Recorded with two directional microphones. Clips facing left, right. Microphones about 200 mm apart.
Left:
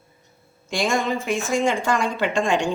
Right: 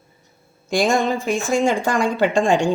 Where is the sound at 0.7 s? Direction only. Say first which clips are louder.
Right 4 dB; 35° right (ahead or behind).